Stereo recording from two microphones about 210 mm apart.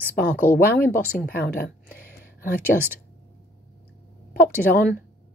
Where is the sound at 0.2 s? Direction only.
45° left (ahead or behind).